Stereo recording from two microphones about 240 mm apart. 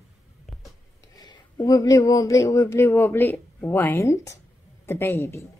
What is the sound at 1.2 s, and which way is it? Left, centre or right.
Speech, centre.